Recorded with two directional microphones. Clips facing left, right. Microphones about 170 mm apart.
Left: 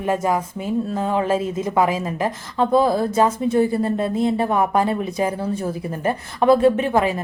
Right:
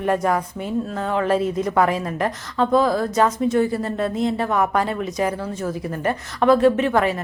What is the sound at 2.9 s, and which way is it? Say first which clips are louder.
A woman's voice: left 1 dB; 25° left (ahead or behind).